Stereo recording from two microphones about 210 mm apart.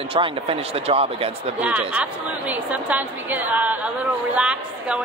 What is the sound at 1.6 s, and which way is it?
A woman's voice, 10° right (ahead or behind).